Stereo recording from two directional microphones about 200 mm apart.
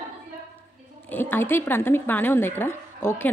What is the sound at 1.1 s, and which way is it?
A man's voice, 10° left (ahead or behind).